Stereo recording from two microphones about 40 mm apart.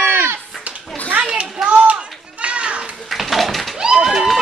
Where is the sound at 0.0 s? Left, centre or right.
Right.